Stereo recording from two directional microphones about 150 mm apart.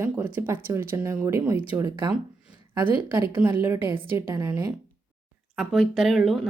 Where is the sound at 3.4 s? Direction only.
5° right (ahead or behind).